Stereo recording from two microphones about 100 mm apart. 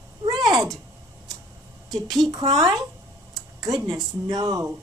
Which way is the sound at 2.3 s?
40° right (ahead or behind).